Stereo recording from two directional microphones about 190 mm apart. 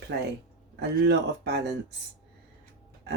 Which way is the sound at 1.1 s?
60° right (ahead or behind).